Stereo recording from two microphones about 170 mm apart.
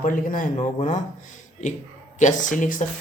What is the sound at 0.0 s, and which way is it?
Speech, 50° left (ahead or behind).